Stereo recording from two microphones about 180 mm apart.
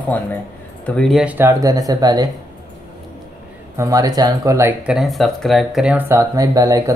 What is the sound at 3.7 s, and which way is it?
Speech, 20° right (ahead or behind).